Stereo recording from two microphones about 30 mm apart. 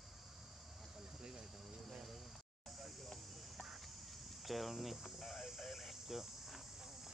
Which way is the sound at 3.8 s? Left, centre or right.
Centre.